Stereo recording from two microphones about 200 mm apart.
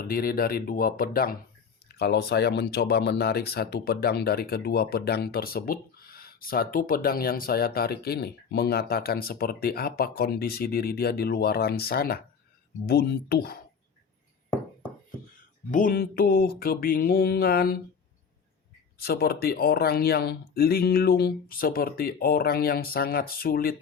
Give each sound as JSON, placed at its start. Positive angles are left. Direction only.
{"t": 0.1, "sound": "speech", "side_deg": 50}
{"t": 15.7, "sound": "speech", "side_deg": 45}
{"t": 18.9, "sound": "speech", "side_deg": 50}